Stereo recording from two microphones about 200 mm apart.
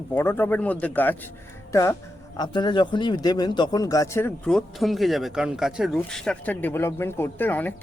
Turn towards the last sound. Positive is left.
turn(degrees=10)  # may be behind; listen again after turning